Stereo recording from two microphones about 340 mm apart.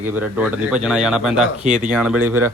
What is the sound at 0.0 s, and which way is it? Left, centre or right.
Speech, centre.